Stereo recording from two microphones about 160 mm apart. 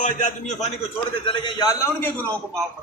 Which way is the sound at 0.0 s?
50° left (ahead or behind).